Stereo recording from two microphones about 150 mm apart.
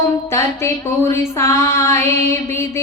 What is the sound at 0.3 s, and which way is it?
Speech, 20° left (ahead or behind).